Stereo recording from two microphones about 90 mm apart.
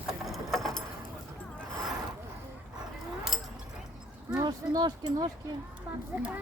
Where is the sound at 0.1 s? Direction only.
Centre (ahead or behind).